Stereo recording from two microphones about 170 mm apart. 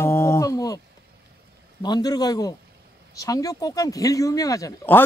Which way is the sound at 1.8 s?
25° left (ahead or behind).